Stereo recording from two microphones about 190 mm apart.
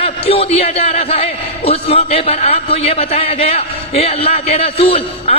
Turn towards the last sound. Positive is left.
turn(degrees=30)  # may be behind; listen again after turning